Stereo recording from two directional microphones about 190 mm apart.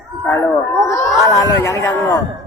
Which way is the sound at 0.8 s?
15° left (ahead or behind).